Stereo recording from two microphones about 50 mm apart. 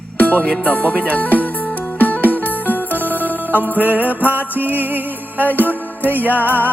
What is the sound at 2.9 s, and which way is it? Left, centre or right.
Music, right.